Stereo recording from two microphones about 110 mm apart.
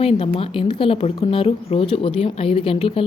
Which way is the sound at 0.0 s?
60° left (ahead or behind).